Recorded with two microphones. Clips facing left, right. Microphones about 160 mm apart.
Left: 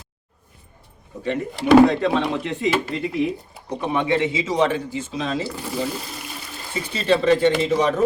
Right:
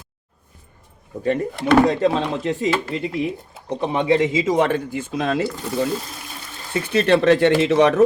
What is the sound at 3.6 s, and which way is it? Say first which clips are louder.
Speech: right 3 dB; 30° right (ahead or behind).